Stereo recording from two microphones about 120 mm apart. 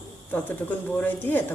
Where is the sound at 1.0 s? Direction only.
15° left (ahead or behind).